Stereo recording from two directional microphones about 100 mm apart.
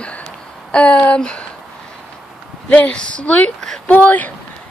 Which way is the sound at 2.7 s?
15° left (ahead or behind).